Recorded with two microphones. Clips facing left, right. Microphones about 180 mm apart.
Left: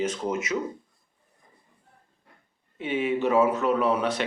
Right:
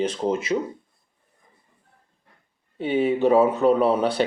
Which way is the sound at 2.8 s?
35° right (ahead or behind).